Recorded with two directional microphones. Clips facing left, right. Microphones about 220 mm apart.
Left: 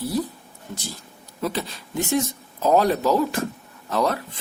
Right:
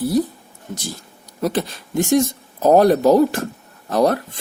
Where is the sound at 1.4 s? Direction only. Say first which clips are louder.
Right 6 dB; 45° right (ahead or behind).